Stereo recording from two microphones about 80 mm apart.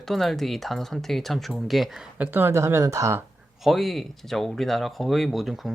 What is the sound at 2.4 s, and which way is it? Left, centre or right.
Speech, right.